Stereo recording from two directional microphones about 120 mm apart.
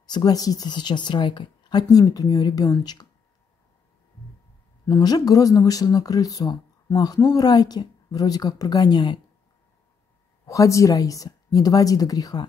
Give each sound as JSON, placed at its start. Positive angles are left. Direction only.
{"t": 0.0, "sound": "speech", "side_deg": 35}
{"t": 4.8, "sound": "speech", "side_deg": 35}
{"t": 10.4, "sound": "a woman's voice", "side_deg": 25}